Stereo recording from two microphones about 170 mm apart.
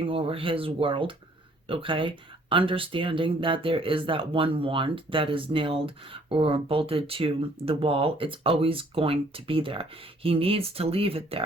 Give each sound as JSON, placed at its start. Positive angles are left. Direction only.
{"t": 0.0, "sound": "speech", "side_deg": -35}